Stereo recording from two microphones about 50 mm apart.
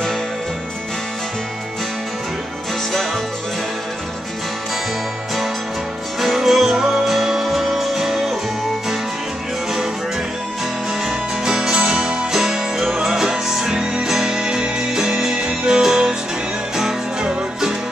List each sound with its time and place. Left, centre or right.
6.1 s music: centre
11.1 s music: centre
12.3 s music: centre